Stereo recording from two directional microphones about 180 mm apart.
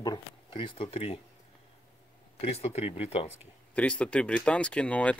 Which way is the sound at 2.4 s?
35° left (ahead or behind).